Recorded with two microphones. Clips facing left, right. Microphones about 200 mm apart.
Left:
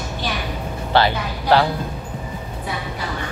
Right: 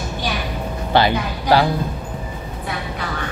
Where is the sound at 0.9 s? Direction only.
15° right (ahead or behind).